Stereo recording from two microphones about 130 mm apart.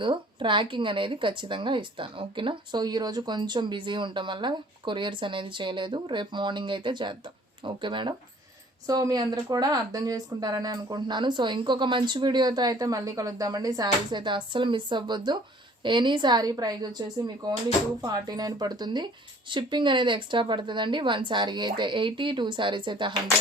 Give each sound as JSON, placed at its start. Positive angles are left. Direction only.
{"t": 0.0, "sound": "speech", "side_deg": -40}